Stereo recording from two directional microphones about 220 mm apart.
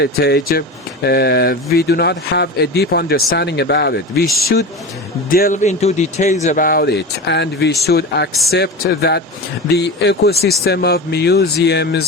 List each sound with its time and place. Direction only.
0.0 s speech: 45° left (ahead or behind)
5.3 s speech: 40° left (ahead or behind)
8.3 s a man's voice: centre (ahead or behind)
8.5 s speech: 45° left (ahead or behind)